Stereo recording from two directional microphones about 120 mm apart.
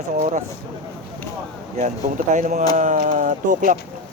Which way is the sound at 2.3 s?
90° right.